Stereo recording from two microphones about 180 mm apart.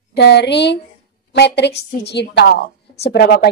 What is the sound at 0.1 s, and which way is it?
A woman's voice, 70° left (ahead or behind).